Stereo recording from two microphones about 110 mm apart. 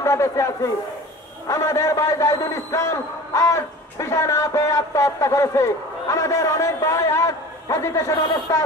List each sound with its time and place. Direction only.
0.0 s a man's voice: 25° left (ahead or behind)